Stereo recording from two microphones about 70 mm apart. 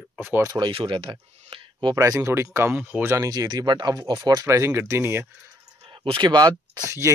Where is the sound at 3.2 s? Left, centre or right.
Right.